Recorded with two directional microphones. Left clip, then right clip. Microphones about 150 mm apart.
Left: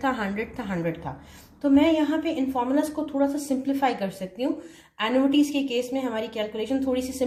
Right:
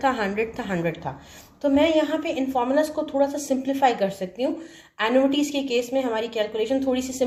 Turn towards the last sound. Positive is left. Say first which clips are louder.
# right 3 dB
turn(degrees=-40)  # may be behind; listen again after turning